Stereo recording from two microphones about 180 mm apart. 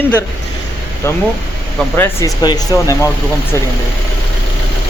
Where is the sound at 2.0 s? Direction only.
20° left (ahead or behind).